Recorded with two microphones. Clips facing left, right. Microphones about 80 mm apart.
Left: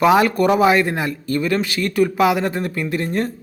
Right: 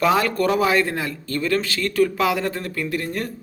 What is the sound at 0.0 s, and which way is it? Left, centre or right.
Speech, centre.